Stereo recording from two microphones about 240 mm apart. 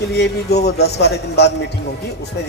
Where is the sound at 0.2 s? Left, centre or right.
Left.